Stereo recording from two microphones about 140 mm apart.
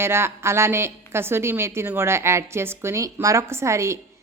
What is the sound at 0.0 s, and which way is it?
A woman's voice, 20° right (ahead or behind).